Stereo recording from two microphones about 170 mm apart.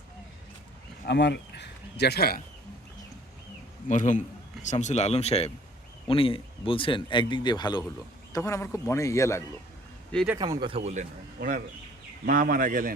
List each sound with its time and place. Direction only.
1.0 s speech: 80° left
3.8 s a man's voice: 45° left (ahead or behind); by 9.4 s 15° left (ahead or behind)
10.3 s speech: 25° right (ahead or behind)
11.3 s speech: 50° right (ahead or behind)